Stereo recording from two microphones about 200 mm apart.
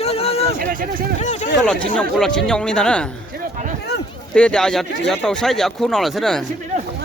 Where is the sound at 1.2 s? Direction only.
35° left (ahead or behind).